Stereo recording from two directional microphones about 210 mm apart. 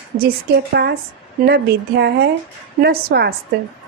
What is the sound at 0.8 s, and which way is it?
A woman's voice, 55° right (ahead or behind).